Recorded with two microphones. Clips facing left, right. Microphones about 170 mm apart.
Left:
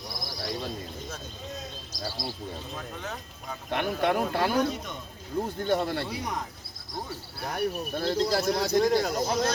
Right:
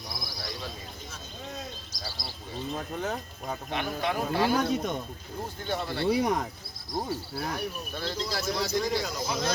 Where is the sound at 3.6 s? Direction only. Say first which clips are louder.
Left 5 dB; 55° left (ahead or behind).